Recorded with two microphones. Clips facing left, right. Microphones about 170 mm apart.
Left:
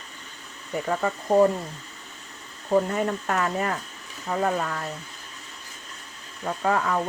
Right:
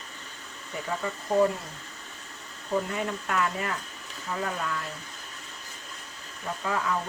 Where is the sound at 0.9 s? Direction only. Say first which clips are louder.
Left 6 dB; 50° left (ahead or behind).